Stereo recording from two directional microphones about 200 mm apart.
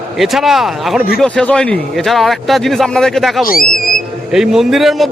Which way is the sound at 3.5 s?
45° left (ahead or behind).